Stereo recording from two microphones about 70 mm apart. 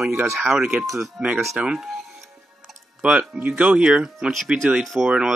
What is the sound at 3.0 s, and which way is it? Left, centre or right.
Speech, centre.